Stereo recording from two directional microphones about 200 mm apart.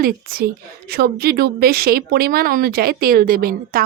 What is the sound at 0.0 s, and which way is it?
A woman's voice, 45° right (ahead or behind).